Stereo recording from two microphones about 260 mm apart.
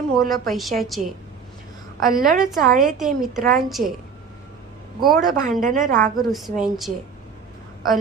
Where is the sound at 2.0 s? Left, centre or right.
Right.